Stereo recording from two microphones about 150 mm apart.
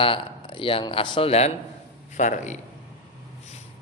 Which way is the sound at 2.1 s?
55° left (ahead or behind).